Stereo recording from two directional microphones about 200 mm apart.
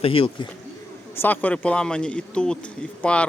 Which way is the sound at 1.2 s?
10° left (ahead or behind).